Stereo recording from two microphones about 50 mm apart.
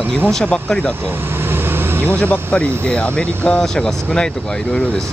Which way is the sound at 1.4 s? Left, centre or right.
Right.